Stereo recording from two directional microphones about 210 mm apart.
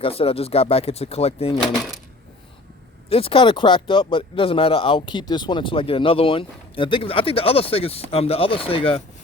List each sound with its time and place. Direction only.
0.0 s speech: 25° left (ahead or behind)
1.5 s speech: centre (ahead or behind)
3.1 s speech: 25° left (ahead or behind)